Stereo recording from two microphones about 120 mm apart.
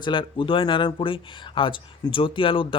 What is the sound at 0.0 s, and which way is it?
Speech, 40° left (ahead or behind).